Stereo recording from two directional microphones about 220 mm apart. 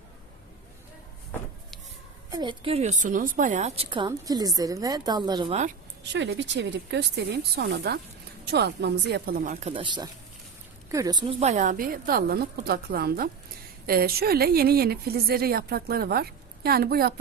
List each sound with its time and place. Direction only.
2.3 s a woman's voice: 20° right (ahead or behind)
6.0 s a woman's voice: 55° right (ahead or behind)